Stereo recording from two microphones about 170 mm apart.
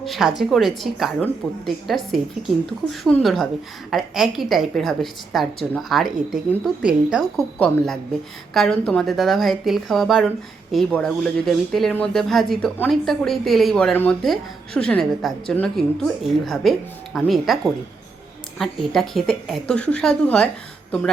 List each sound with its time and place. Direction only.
0.0 s speech: centre (ahead or behind)
18.6 s speech: centre (ahead or behind)